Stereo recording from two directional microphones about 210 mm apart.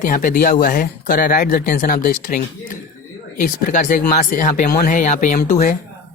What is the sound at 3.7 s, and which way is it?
Speech, 40° left (ahead or behind).